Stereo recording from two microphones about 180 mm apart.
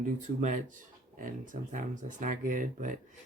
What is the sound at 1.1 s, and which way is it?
Speech, 45° right (ahead or behind).